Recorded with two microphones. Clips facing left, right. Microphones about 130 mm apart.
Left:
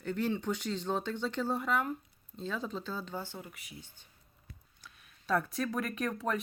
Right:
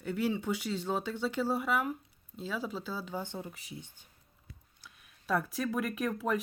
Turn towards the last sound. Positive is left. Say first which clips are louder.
# right 2 dB
turn(degrees=-5)  # may be behind; listen again after turning